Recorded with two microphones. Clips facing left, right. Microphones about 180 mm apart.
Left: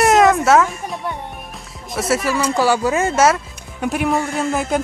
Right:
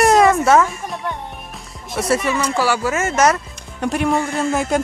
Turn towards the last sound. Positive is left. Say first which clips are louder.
# right 1 dB
turn(degrees=0)  # may be behind; listen again after turning